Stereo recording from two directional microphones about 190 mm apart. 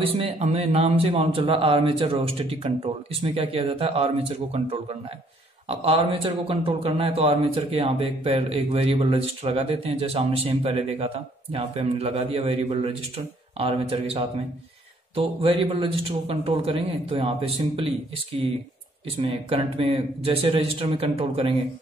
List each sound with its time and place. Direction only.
0.0 s a man's voice: 30° right (ahead or behind)
19.2 s a man's voice: 30° right (ahead or behind)